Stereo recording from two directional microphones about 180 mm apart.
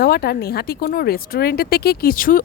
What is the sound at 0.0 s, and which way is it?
Speech, 60° left (ahead or behind).